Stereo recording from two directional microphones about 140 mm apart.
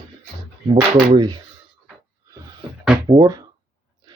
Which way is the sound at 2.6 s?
40° right (ahead or behind).